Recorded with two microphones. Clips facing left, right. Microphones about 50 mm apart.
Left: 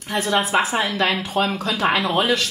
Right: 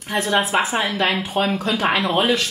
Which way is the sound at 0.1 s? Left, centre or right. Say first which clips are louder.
Even; centre.